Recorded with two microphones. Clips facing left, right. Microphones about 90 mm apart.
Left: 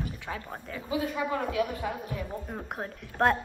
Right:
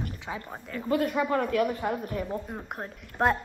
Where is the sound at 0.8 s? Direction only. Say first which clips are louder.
Right 4 dB; 60° right (ahead or behind).